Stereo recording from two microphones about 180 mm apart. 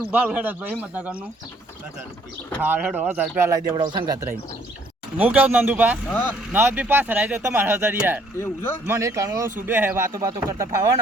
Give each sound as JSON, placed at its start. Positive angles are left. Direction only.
{"t": 0.1, "sound": "speech", "side_deg": -10}
{"t": 2.6, "sound": "speech", "side_deg": -10}
{"t": 3.7, "sound": "speech", "side_deg": -25}
{"t": 6.1, "sound": "speech", "side_deg": 10}
{"t": 6.5, "sound": "speech", "side_deg": -10}
{"t": 8.4, "sound": "speech", "side_deg": 15}
{"t": 8.9, "sound": "speech", "side_deg": -15}